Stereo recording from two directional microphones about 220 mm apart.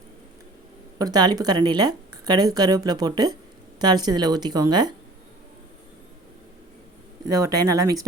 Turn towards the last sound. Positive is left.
turn(degrees=-15)  # may be behind; listen again after turning